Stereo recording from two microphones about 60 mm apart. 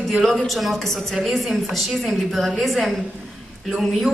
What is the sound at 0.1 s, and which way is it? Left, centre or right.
A woman's voice, centre.